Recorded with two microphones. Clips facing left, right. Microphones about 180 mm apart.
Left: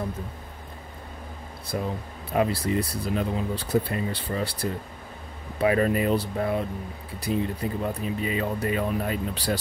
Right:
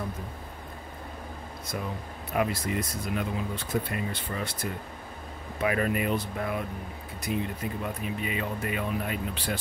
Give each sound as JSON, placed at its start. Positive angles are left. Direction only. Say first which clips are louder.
{"t": 1.7, "sound": "speech", "louder": "left 5 dB", "side_deg": 30}